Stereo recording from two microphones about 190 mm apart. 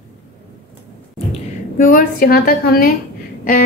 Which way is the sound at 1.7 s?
45° left (ahead or behind).